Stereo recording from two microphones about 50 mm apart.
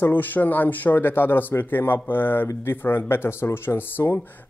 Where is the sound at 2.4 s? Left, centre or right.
Left.